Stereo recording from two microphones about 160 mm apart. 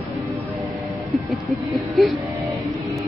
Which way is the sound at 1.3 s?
Centre (ahead or behind).